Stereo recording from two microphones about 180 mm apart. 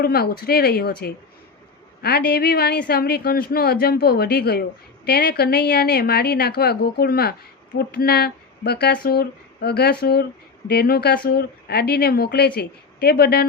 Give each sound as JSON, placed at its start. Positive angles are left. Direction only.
{"t": 0.0, "sound": "a woman's voice", "side_deg": 55}